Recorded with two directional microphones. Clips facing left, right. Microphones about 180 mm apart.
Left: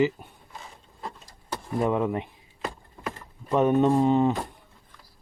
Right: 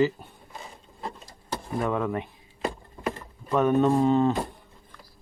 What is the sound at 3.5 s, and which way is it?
Speech, 25° left (ahead or behind).